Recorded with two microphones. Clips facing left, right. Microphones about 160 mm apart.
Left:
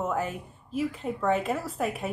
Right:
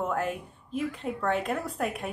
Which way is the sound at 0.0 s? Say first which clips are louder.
Even; 5° left (ahead or behind).